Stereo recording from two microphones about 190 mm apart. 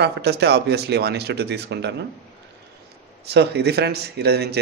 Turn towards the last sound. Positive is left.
turn(degrees=-60)  # may be behind; listen again after turning